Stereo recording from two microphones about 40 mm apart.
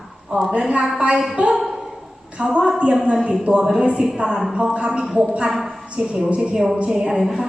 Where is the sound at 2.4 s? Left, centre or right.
Right.